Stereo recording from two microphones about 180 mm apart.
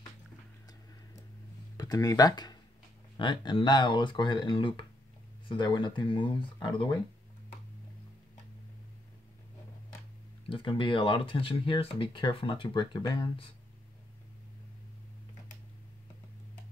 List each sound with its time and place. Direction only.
1.8 s speech: 20° left (ahead or behind)
10.5 s speech: 30° left (ahead or behind)